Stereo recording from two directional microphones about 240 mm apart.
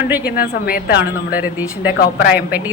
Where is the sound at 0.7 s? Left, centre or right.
Left.